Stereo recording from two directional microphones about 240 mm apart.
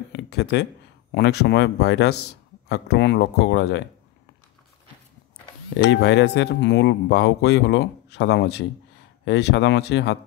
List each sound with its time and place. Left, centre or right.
0.1 s a sound: left
1.1 s speech: left
5.9 s speech: left